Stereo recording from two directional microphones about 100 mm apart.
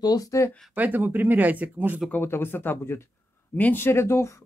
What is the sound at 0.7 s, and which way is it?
Speech, 15° right (ahead or behind).